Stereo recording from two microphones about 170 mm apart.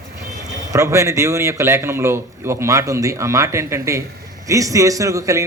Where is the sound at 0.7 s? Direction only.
20° right (ahead or behind).